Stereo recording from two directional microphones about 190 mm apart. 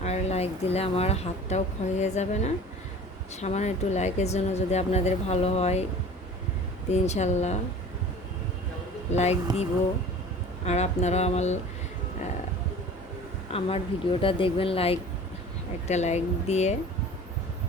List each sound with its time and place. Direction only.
0.0 s a woman's voice: 35° left (ahead or behind)
6.9 s a woman's voice: 35° left (ahead or behind)
9.1 s a woman's voice: 35° left (ahead or behind)
10.7 s a woman's voice: 35° left (ahead or behind)
13.5 s a woman's voice: 30° left (ahead or behind)